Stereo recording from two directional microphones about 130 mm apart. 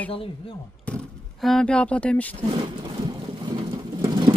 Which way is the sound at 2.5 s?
35° right (ahead or behind).